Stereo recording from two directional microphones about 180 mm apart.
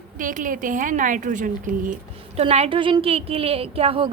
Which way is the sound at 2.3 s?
35° right (ahead or behind).